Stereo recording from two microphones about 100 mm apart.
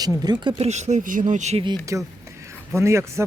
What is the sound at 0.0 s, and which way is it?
Speech, 40° right (ahead or behind).